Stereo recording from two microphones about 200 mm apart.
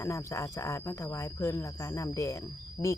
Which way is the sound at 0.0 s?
15° left (ahead or behind).